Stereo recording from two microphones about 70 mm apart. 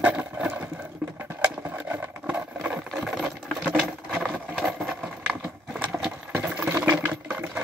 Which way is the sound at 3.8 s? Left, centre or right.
Centre.